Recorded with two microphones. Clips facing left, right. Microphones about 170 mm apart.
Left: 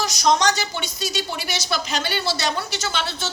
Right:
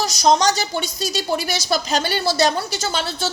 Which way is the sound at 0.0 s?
35° right (ahead or behind).